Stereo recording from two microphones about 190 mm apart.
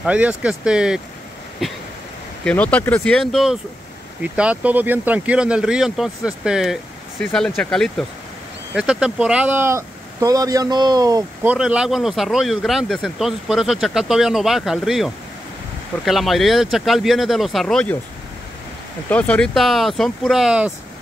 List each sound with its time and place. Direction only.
0.0 s speech: 5° right (ahead or behind)
11.4 s speech: 5° right (ahead or behind)
19.0 s speech: 5° left (ahead or behind)